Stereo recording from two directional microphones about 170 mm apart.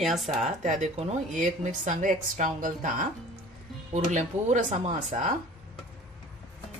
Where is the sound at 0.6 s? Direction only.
45° right (ahead or behind).